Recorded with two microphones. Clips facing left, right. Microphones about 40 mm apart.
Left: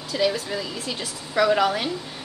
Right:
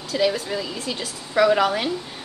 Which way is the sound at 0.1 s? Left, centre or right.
Centre.